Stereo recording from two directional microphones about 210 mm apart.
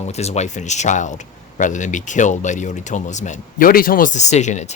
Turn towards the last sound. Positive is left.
turn(degrees=35)  # may be behind; listen again after turning